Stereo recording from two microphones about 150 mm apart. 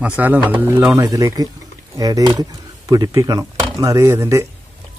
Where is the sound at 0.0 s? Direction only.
10° right (ahead or behind).